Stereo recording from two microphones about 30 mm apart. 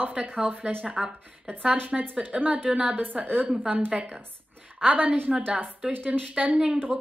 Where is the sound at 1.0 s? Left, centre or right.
Centre.